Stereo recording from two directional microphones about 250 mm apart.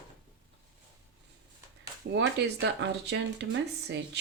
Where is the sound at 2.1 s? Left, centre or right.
Right.